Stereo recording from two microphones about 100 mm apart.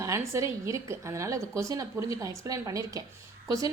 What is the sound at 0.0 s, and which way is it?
A woman's voice, 30° right (ahead or behind).